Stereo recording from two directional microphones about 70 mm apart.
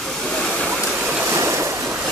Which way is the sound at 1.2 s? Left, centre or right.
Right.